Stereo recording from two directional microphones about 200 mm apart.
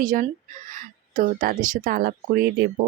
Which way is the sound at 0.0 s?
40° right (ahead or behind).